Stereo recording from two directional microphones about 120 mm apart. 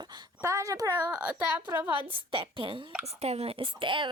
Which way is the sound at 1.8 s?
45° right (ahead or behind).